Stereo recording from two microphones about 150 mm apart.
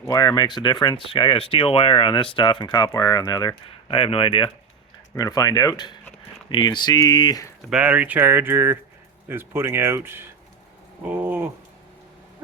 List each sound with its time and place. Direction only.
0.1 s speech: 25° left (ahead or behind)
5.1 s speech: 25° left (ahead or behind)
7.7 s speech: 10° right (ahead or behind)